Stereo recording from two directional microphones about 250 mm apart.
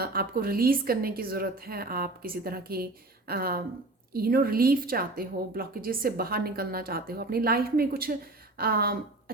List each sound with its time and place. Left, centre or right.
0.0 s a woman's voice: right